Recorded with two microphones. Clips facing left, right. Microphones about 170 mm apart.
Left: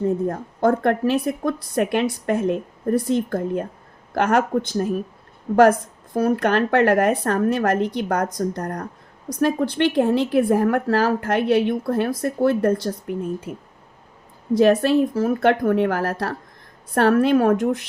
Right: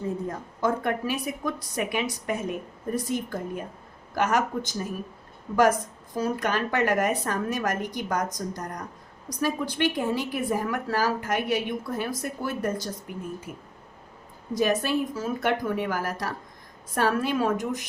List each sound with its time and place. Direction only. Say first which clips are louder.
0.0 s a woman's voice: left 9 dB; 60° left (ahead or behind)
14.5 s a woman's voice: left 9 dB; 60° left (ahead or behind)